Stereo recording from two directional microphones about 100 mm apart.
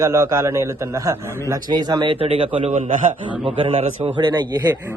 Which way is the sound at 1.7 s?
45° right (ahead or behind).